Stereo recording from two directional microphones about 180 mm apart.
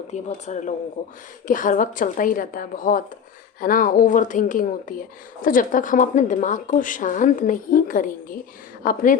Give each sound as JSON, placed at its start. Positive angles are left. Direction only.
{"t": 0.3, "sound": "speech", "side_deg": 45}